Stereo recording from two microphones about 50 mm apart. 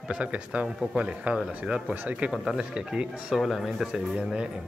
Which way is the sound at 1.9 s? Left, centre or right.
Right.